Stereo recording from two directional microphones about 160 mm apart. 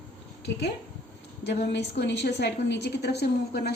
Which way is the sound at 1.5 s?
90° left.